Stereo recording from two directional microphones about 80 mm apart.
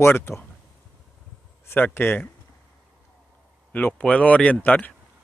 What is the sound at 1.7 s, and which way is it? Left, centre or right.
Speech, left.